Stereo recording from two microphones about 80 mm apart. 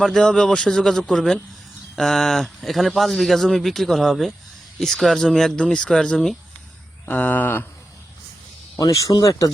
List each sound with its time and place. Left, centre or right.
0.0 s speech: centre
7.0 s speech: centre
8.8 s speech: left